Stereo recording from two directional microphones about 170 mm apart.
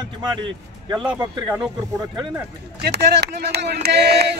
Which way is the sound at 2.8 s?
75° right (ahead or behind).